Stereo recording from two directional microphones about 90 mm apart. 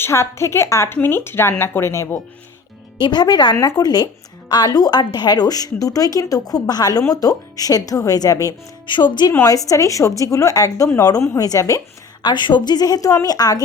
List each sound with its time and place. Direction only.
0.0 s a woman's voice: 30° left (ahead or behind)
3.0 s a woman's voice: 50° left (ahead or behind)
8.9 s speech: 60° left (ahead or behind)
9.4 s a woman's voice: 40° left (ahead or behind)
12.2 s a woman's voice: 60° left (ahead or behind)